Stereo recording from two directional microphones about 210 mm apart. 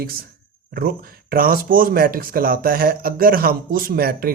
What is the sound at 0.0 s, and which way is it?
Speech, 45° right (ahead or behind).